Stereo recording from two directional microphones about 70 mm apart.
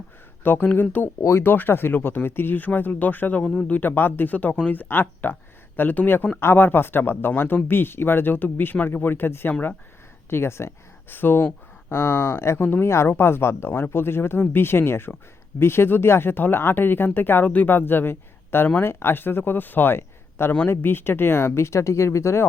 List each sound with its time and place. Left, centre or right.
0.4 s speech: left
1.2 s speech: left